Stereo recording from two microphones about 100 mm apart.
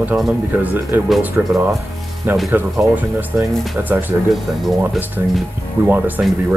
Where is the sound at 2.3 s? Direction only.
20° right (ahead or behind).